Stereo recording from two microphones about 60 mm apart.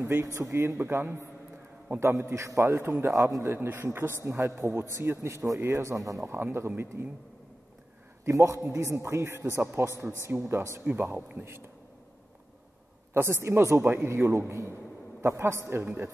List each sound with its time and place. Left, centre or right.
0.0 s a man's voice: right
0.7 s a man's voice: right
3.1 s a man's voice: right
3.4 s a man's voice: right
4.1 s a man's voice: right
5.3 s speech: right
5.6 s speech: right
6.2 s a man's voice: right
8.3 s a man's voice: right
10.8 s a man's voice: right
13.1 s a man's voice: right
15.8 s a man's voice: right